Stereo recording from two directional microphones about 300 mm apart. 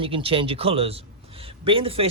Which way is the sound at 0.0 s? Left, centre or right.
Centre.